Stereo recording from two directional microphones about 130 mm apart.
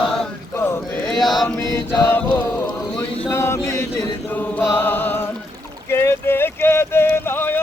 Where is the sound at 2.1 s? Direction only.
15° left (ahead or behind).